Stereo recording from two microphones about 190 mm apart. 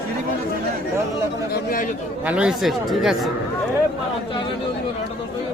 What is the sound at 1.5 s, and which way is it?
Speech, 50° left (ahead or behind).